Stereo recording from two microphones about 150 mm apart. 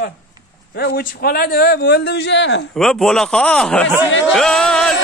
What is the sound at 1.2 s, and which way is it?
Speech, 90° left.